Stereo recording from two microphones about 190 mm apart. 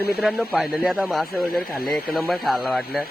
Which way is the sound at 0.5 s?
5° right (ahead or behind).